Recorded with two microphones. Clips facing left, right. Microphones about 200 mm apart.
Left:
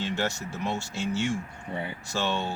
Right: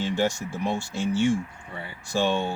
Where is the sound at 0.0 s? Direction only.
15° right (ahead or behind).